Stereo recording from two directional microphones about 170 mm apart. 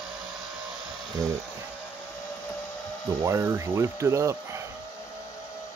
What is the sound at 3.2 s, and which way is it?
Speech, 15° right (ahead or behind).